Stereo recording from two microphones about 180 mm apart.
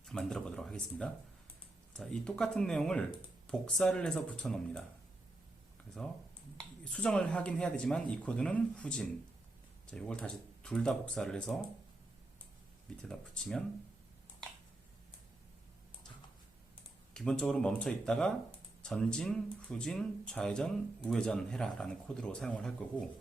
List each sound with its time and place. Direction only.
0.0 s speech: centre (ahead or behind)
6.6 s speech: 5° left (ahead or behind)
13.0 s speech: 5° left (ahead or behind)
17.2 s speech: 5° left (ahead or behind)